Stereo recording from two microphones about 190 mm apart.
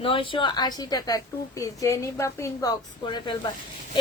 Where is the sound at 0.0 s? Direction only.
25° left (ahead or behind).